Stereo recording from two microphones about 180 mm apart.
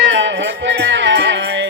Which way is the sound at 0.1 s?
90° right.